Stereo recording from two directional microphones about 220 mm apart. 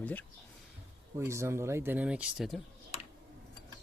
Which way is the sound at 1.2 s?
10° right (ahead or behind).